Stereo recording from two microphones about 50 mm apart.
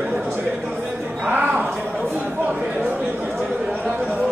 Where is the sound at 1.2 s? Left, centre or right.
Right.